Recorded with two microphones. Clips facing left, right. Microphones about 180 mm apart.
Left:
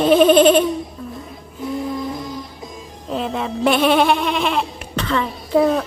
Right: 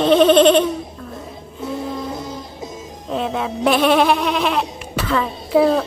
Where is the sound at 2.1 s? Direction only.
25° right (ahead or behind).